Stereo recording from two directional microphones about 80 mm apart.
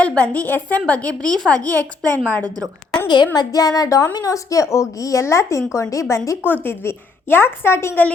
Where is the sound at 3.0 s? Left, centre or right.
Left.